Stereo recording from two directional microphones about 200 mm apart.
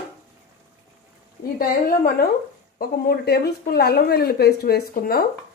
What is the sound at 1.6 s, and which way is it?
Speech, 45° left (ahead or behind).